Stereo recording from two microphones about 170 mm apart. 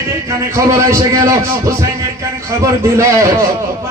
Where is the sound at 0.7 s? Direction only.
20° right (ahead or behind).